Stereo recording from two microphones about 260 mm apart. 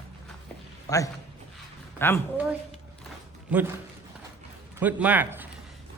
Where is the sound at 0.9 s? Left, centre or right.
Centre.